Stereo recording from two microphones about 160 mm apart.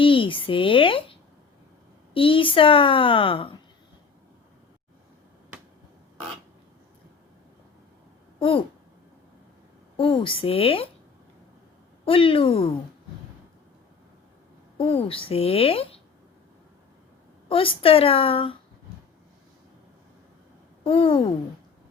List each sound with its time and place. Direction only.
0.0 s a woman's voice: 30° left (ahead or behind)
8.4 s speech: 35° left (ahead or behind)
10.0 s a woman's voice: 35° left (ahead or behind)
12.0 s a woman's voice: 35° left (ahead or behind)
14.8 s a woman's voice: 35° left (ahead or behind)
17.5 s a woman's voice: 35° left (ahead or behind)
20.8 s a woman's voice: 35° left (ahead or behind)